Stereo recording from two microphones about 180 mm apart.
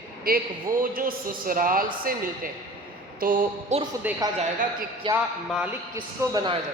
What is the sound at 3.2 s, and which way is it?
Speech, 50° right (ahead or behind).